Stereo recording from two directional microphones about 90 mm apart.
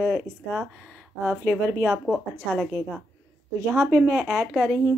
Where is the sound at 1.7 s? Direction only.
25° right (ahead or behind).